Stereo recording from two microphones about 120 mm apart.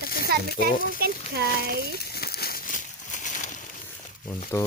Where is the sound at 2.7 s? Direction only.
90° left.